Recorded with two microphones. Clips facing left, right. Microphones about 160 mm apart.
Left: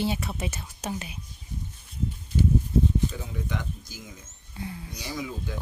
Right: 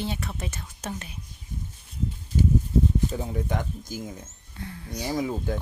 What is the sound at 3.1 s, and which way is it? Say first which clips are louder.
Speech: right 5 dB; 40° right (ahead or behind).